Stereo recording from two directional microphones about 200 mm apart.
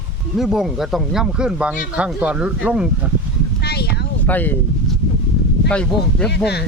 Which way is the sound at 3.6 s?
55° left (ahead or behind).